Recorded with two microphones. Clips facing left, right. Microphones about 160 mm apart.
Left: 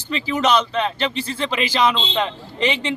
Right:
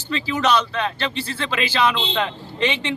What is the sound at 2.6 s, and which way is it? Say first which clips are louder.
Speech: left 2 dB; 35° left (ahead or behind).